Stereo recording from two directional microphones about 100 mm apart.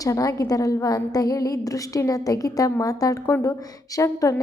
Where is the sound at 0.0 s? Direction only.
35° left (ahead or behind).